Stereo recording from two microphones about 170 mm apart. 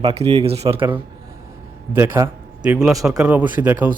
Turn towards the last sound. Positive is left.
turn(degrees=-10)  # may be behind; listen again after turning